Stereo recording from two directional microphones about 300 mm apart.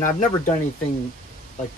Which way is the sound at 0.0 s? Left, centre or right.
Left.